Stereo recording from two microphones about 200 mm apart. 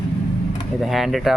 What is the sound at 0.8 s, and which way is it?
Speech, centre (ahead or behind).